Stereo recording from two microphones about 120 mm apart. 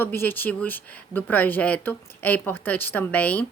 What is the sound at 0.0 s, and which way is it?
Speech, 20° left (ahead or behind).